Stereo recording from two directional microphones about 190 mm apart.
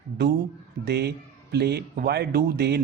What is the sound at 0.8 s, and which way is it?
Speech, 60° right (ahead or behind).